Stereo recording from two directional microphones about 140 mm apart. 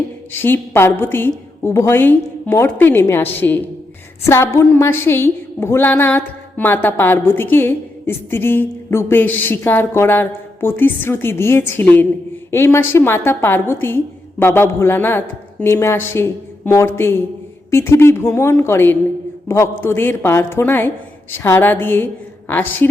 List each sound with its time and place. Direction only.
0.3 s a woman's voice: 15° left (ahead or behind)